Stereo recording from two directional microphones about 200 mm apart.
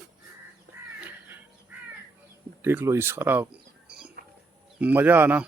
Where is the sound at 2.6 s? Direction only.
10° right (ahead or behind).